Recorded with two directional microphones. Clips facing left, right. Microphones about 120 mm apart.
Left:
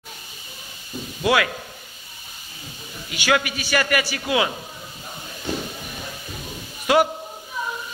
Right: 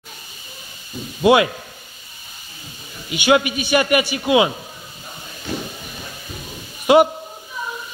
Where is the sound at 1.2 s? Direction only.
20° right (ahead or behind).